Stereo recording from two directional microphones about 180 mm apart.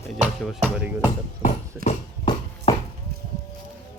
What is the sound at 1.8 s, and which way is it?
Clip-clop, 55° right (ahead or behind).